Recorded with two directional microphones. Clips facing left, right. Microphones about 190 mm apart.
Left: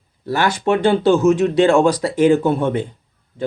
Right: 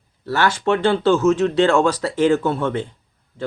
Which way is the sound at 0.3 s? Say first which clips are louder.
Left 1 dB; 15° left (ahead or behind).